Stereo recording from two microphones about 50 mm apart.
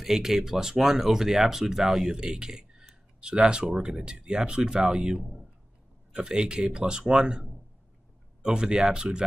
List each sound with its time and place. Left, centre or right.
0.0 s speech: centre